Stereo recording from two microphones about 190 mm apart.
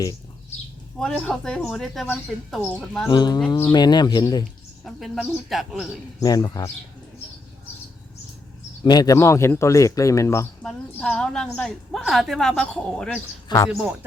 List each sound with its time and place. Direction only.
0.9 s a woman's voice: 5° left (ahead or behind)
3.1 s speech: 20° left (ahead or behind)
4.8 s a woman's voice: centre (ahead or behind)
6.1 s speech: 20° left (ahead or behind)
8.8 s speech: 20° left (ahead or behind)
10.6 s a woman's voice: 5° left (ahead or behind)